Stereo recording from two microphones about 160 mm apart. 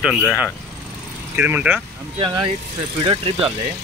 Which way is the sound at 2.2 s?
30° right (ahead or behind).